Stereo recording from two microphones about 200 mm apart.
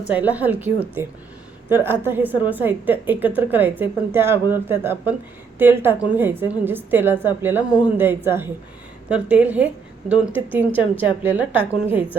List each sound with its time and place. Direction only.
0.1 s a woman's voice: 10° right (ahead or behind)